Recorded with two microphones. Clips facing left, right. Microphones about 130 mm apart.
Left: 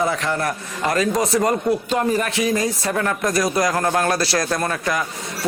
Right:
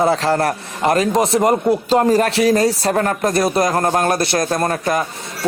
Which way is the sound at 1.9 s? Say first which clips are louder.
Right 6 dB; 35° right (ahead or behind).